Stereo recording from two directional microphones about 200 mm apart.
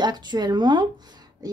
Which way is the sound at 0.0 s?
20° right (ahead or behind).